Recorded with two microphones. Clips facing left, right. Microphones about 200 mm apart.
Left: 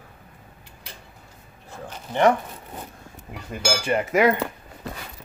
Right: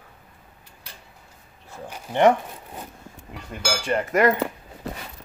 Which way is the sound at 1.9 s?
20° right (ahead or behind).